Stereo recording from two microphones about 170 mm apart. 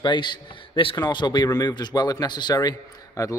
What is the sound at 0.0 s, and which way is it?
A man's voice, 25° left (ahead or behind).